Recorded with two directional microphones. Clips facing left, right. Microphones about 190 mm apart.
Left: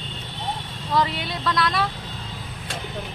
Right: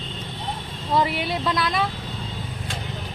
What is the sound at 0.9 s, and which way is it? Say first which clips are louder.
Speech: right 2 dB; 20° right (ahead or behind).